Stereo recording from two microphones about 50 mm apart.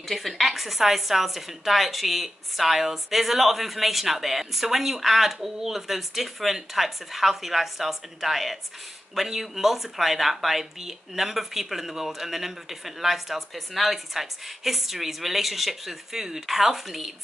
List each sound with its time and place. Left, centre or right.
0.1 s speech: centre